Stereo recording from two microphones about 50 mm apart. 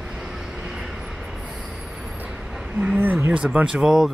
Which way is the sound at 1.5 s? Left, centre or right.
Centre.